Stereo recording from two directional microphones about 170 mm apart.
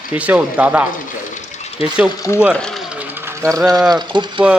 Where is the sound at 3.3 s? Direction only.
20° right (ahead or behind).